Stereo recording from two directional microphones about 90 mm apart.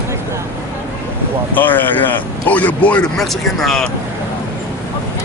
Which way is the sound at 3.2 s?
5° left (ahead or behind).